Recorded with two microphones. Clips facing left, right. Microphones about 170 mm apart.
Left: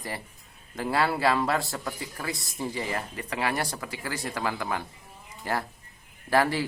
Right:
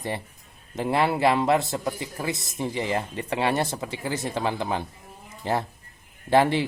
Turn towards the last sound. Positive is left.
turn(degrees=-25)  # may be behind; listen again after turning